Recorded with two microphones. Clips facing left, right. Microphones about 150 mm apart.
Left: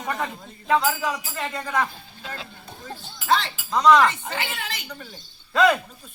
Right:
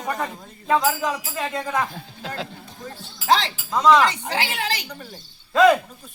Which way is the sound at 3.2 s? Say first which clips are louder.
Right 3 dB; 85° right.